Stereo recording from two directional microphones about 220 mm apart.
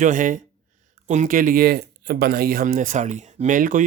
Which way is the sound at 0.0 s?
35° right (ahead or behind).